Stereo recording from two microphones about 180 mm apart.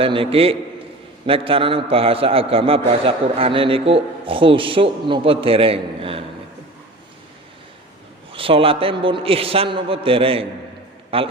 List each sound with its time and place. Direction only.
0.0 s a man's voice: 30° right (ahead or behind)
8.3 s a man's voice: 30° right (ahead or behind)